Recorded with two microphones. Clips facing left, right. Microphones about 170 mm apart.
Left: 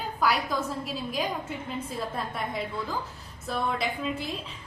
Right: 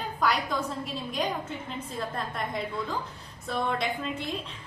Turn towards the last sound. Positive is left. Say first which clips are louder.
# left 1 dB
turn(degrees=5)  # may be behind; listen again after turning